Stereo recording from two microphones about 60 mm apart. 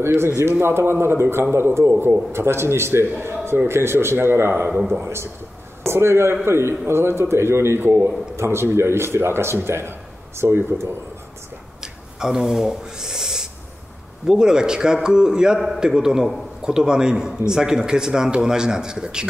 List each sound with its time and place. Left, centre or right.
0.0 s speech: right
5.9 s a man's voice: right
11.8 s owl: centre
14.2 s a man's voice: centre